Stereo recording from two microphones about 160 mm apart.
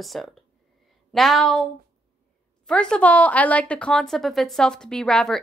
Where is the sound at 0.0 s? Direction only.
Centre (ahead or behind).